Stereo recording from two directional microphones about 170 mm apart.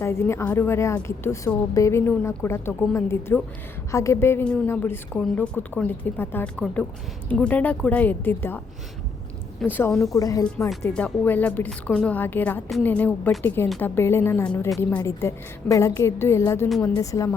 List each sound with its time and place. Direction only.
0.0 s a woman's voice: 15° left (ahead or behind)
10.8 s a woman's voice: 5° left (ahead or behind)